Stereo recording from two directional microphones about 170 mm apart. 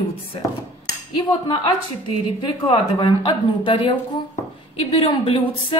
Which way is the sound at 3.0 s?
30° left (ahead or behind).